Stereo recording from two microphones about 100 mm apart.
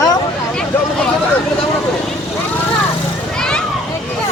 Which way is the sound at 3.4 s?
10° left (ahead or behind).